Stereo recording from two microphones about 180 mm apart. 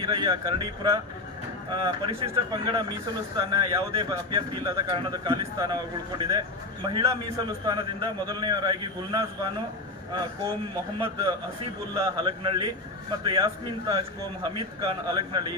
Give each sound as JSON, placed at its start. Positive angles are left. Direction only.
{"t": 0.0, "sound": "speech", "side_deg": -25}
{"t": 11.0, "sound": "speech", "side_deg": -25}